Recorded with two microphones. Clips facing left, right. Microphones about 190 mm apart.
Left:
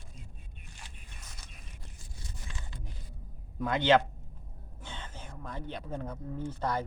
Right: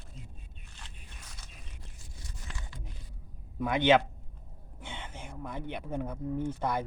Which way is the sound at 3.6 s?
15° right (ahead or behind).